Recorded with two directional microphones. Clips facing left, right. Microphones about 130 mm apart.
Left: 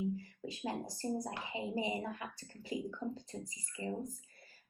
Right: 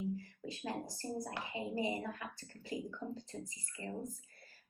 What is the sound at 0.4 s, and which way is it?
Speech, 15° left (ahead or behind).